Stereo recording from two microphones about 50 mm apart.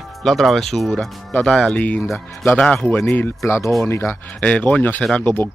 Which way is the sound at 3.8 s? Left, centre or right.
Left.